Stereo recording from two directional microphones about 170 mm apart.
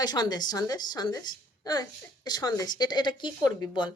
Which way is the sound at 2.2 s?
25° left (ahead or behind).